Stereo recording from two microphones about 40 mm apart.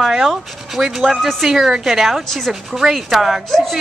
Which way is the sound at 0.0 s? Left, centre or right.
Centre.